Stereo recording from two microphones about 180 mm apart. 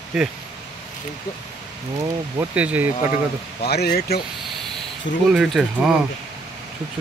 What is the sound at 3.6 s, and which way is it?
Speech, 60° left (ahead or behind).